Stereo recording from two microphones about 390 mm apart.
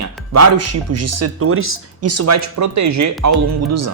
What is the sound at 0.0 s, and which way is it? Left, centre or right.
Speech, right.